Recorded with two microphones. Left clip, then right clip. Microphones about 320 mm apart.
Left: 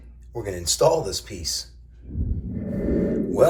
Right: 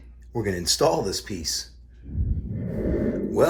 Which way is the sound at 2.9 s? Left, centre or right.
Right.